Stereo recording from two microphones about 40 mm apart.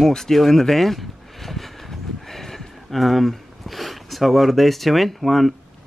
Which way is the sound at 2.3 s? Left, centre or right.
Centre.